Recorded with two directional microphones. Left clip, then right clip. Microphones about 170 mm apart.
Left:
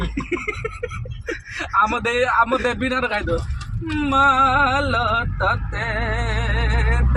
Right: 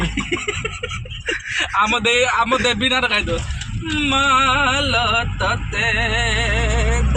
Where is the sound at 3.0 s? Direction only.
10° left (ahead or behind).